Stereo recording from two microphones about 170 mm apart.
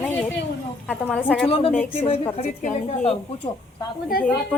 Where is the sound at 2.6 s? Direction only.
45° left (ahead or behind).